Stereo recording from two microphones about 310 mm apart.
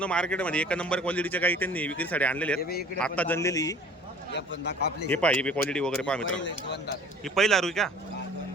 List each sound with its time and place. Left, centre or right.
0.0 s a man's voice: centre
2.6 s a man's voice: left
3.0 s a man's voice: centre
4.3 s a man's voice: left
5.1 s a man's voice: centre
6.2 s a man's voice: left
7.3 s a man's voice: centre